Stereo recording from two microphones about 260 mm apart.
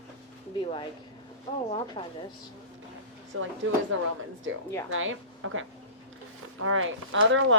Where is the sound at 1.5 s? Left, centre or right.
Centre.